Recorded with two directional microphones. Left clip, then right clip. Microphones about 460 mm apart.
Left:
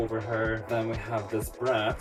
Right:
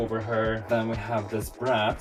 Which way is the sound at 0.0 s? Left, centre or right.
Centre.